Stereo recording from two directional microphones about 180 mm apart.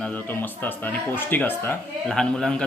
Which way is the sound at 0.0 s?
10° left (ahead or behind).